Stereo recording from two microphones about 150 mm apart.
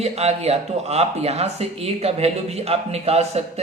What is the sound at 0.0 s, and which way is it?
A man's voice, 45° right (ahead or behind).